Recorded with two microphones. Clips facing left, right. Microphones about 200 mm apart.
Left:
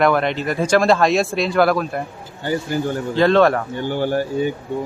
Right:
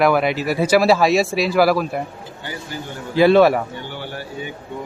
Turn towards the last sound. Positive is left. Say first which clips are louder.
# left 10 dB
turn(degrees=45)  # may be behind; listen again after turning